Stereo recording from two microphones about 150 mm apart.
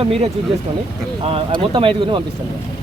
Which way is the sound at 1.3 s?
40° right (ahead or behind).